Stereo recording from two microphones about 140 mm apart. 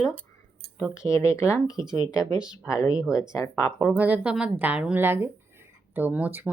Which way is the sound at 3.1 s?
25° left (ahead or behind).